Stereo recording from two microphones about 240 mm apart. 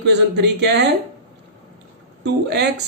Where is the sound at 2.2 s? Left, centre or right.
Right.